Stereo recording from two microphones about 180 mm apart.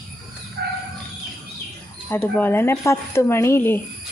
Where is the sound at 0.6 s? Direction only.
60° right (ahead or behind).